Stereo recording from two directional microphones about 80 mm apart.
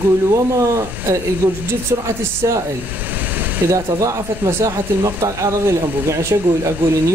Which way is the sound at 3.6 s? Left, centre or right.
Right.